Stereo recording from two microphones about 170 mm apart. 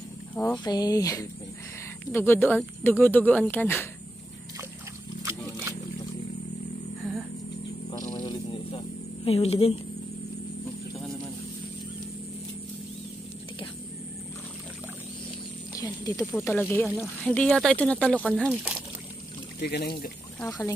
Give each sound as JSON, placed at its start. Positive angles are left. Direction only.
{"t": 0.3, "sound": "speech", "side_deg": 10}
{"t": 0.7, "sound": "speech", "side_deg": 20}
{"t": 8.1, "sound": "a sound", "side_deg": 25}
{"t": 15.7, "sound": "snake", "side_deg": 20}
{"t": 16.4, "sound": "speech", "side_deg": 10}
{"t": 19.6, "sound": "speech", "side_deg": 70}
{"t": 20.3, "sound": "speech", "side_deg": 10}